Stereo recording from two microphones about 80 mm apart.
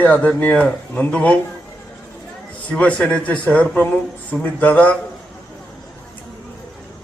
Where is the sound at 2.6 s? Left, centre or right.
Centre.